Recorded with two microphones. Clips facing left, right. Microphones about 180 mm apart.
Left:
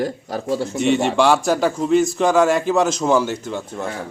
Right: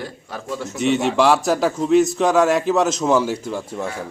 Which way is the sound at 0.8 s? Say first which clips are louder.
Even; centre (ahead or behind).